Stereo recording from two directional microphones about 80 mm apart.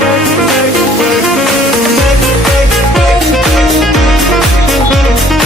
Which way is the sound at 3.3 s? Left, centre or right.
Centre.